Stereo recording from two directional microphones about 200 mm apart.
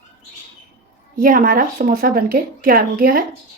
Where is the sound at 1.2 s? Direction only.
45° right (ahead or behind).